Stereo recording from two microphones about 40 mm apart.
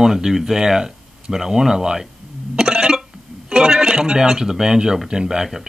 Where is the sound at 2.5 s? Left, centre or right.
Centre.